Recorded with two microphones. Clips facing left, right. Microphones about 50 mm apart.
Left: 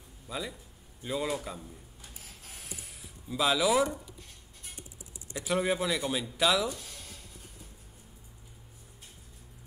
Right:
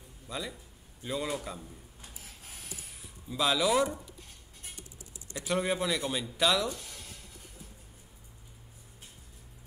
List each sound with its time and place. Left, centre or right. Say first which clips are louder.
0.3 s speech: left 1 dB; centre
2.6 s a sound: left 1 dB; centre
5.3 s speech: left 1 dB; centre